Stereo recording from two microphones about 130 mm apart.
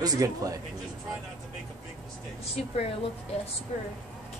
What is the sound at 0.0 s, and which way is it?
Speech, 30° right (ahead or behind).